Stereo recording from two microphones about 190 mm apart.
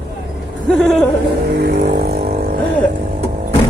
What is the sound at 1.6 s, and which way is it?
Vehicle, 55° right (ahead or behind).